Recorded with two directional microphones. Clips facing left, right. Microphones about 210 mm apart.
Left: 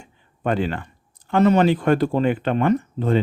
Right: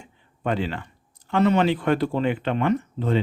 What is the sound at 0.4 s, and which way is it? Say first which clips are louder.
Speech: left 3 dB; 50° left (ahead or behind).